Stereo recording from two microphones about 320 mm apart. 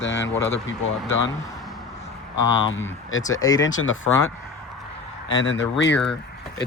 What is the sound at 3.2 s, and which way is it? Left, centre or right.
Speech, centre.